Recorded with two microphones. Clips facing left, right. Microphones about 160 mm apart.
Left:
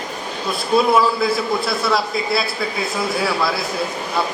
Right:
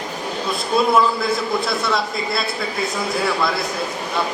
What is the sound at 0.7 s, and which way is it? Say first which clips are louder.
A man's voice: left 1 dB; centre (ahead or behind).